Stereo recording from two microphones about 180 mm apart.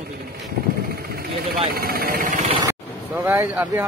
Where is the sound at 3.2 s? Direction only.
15° right (ahead or behind).